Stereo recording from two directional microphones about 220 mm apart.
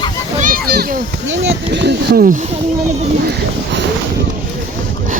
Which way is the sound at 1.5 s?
50° right (ahead or behind).